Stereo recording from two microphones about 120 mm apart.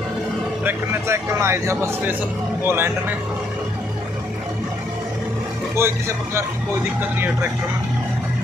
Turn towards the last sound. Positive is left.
turn(degrees=-20)  # may be behind; listen again after turning